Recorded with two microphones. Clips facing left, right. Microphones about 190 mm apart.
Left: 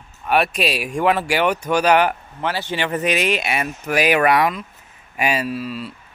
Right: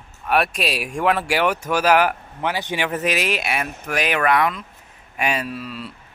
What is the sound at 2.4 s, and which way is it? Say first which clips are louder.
Speech: even; 15° right (ahead or behind).